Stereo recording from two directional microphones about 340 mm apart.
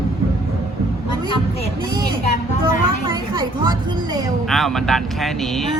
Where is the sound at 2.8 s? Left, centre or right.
Centre.